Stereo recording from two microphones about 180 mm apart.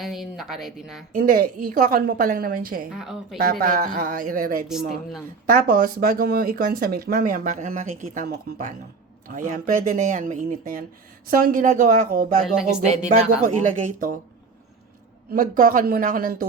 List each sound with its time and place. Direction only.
0.0 s speech: centre (ahead or behind)
1.1 s speech: 50° right (ahead or behind)
2.9 s speech: centre (ahead or behind)
3.3 s speech: 55° right (ahead or behind)
4.7 s speech: centre (ahead or behind)
5.5 s speech: 50° right (ahead or behind)
13.4 s speech: 45° right (ahead or behind)
15.3 s speech: 50° right (ahead or behind)